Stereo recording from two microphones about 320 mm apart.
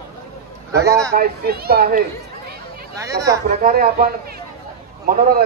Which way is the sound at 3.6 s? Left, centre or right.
Right.